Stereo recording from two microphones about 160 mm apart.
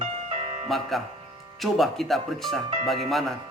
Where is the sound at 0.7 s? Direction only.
Centre (ahead or behind).